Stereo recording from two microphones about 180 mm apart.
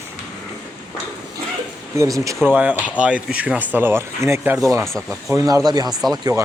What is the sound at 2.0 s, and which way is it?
Speech, 15° right (ahead or behind).